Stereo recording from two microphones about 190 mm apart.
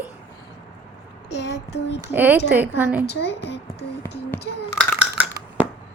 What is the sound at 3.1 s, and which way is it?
Speech, 60° left (ahead or behind).